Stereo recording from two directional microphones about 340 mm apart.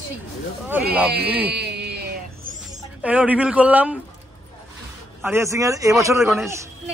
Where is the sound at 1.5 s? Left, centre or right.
Right.